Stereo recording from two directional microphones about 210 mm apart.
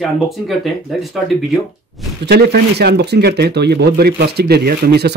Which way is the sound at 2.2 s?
50° right (ahead or behind).